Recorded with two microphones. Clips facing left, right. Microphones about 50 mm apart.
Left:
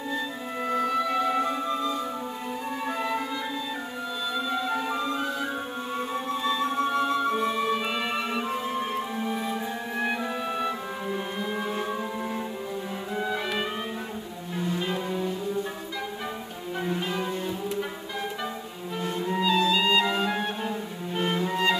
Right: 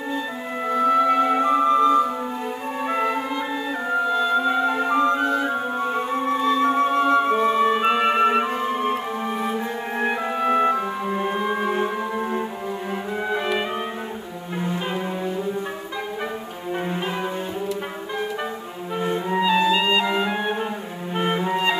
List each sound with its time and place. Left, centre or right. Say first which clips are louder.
0.7 s music: right 8 dB; right
13.2 s music: right 4 dB; right
16.8 s cello: right 1 dB; right
18.9 s clarinet: right 5 dB; right